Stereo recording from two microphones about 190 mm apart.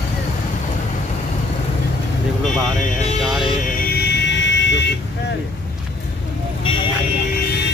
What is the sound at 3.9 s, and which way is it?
Vehicle, 60° left (ahead or behind).